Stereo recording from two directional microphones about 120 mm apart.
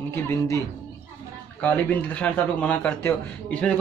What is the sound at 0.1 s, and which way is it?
Speech, 25° left (ahead or behind).